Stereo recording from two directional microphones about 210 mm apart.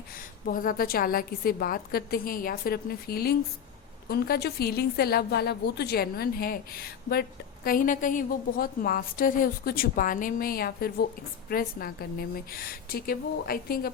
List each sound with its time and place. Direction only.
0.4 s a woman's voice: 40° left (ahead or behind)